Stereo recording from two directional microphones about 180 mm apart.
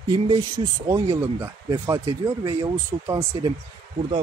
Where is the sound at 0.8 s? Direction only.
20° right (ahead or behind).